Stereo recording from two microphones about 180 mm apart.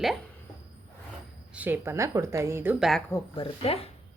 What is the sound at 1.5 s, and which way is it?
Speech, 10° right (ahead or behind).